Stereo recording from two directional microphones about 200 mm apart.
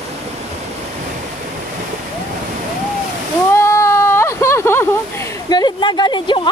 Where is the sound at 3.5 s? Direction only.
15° left (ahead or behind).